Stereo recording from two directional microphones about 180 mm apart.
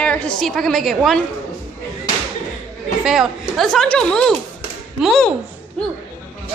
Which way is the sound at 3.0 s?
5° right (ahead or behind).